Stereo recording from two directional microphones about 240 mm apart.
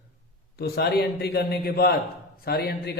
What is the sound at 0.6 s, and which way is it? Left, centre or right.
A man's voice, left.